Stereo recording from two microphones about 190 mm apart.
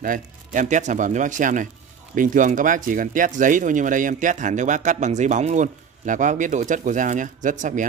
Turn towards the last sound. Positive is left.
turn(degrees=-40)  # may be behind; listen again after turning